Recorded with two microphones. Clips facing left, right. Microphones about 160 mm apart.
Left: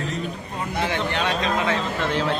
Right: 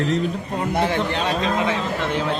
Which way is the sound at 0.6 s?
60° right (ahead or behind).